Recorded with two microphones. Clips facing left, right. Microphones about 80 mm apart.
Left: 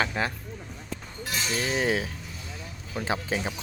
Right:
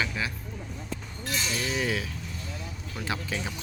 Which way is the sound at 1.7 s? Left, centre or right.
Left.